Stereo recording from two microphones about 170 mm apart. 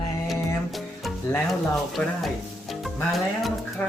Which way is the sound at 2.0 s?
10° left (ahead or behind).